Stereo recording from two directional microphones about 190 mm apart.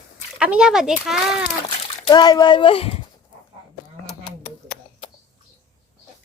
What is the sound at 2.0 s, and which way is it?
Speech, 20° left (ahead or behind).